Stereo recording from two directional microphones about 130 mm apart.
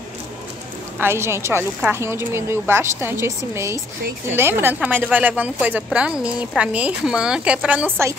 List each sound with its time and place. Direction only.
0.9 s a woman's voice: 20° right (ahead or behind)